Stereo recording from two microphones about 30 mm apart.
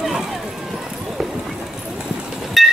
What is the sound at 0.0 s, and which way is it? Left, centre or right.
Clip-clop, centre.